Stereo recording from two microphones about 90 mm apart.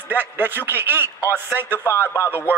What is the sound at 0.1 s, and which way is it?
A man's voice, 25° right (ahead or behind).